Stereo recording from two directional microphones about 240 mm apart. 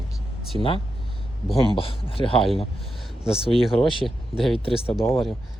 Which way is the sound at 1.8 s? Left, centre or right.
Left.